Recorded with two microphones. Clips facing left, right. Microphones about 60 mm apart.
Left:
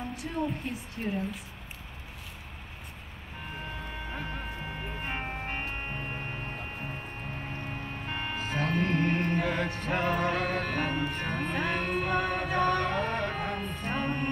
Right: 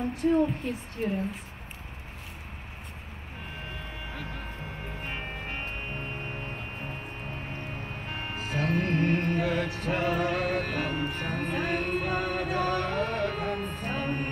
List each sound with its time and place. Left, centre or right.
0.1 s a woman's voice: right
4.1 s music: left
8.1 s music: left
13.6 s music: right
13.8 s music: left